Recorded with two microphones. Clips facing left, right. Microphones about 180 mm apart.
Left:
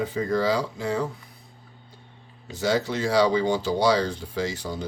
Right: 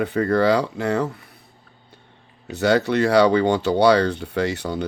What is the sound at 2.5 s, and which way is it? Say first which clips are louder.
Speech: right 6 dB; 65° right (ahead or behind).